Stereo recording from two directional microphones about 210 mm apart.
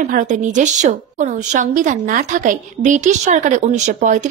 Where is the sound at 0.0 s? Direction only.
40° right (ahead or behind).